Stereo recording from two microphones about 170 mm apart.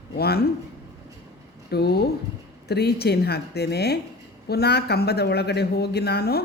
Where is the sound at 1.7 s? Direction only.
70° left (ahead or behind).